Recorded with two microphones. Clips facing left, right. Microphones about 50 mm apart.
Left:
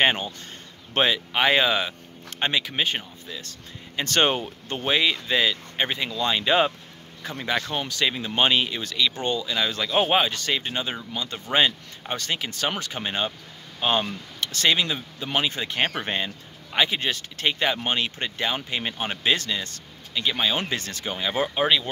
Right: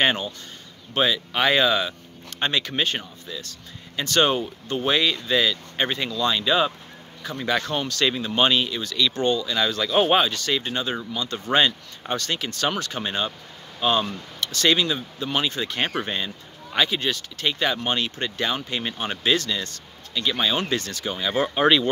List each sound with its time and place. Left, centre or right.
0.0 s speech: left
0.9 s speech: left
1.3 s speech: centre
3.3 s speech: left
4.7 s speech: centre
6.1 s speech: left
10.3 s speech: left
14.4 s a sound: left
14.7 s speech: centre
19.5 s a sound: left
20.2 s speech: centre
21.3 s speech: centre